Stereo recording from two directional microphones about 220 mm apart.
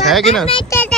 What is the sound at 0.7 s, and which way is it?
Speech, 15° left (ahead or behind).